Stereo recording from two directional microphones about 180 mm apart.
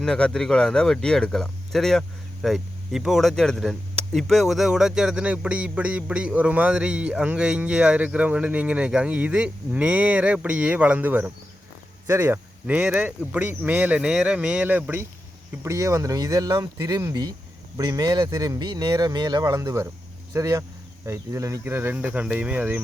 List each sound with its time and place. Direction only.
0.0 s speech: 5° left (ahead or behind)